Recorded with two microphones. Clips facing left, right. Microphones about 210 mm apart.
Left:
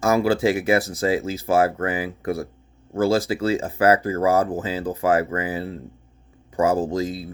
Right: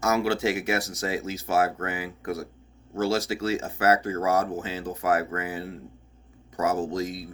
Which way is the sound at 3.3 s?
30° left (ahead or behind).